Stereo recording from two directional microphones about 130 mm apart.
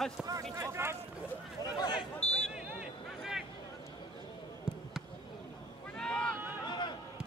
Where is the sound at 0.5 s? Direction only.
20° right (ahead or behind).